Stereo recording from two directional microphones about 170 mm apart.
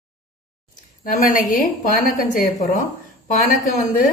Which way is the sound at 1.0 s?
55° left (ahead or behind).